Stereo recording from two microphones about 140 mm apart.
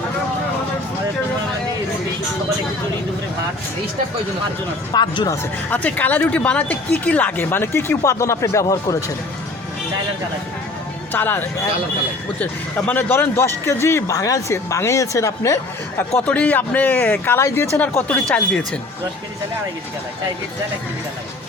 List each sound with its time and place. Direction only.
4.9 s speech: 30° left (ahead or behind)
5.7 s speech: 10° left (ahead or behind)
11.1 s speech: 15° left (ahead or behind)
16.0 s speech: 10° left (ahead or behind)